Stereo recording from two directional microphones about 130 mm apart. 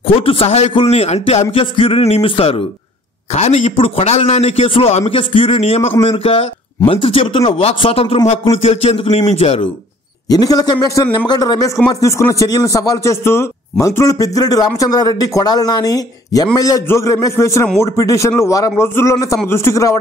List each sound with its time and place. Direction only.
0.0 s a man's voice: 45° left (ahead or behind)
3.3 s a man's voice: 55° left (ahead or behind)
10.3 s a man's voice: 30° left (ahead or behind)